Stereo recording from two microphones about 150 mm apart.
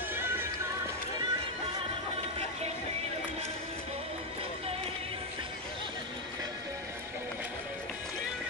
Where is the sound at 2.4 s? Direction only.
45° right (ahead or behind).